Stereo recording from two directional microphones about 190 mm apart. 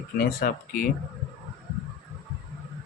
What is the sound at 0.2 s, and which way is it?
Speech, 50° left (ahead or behind).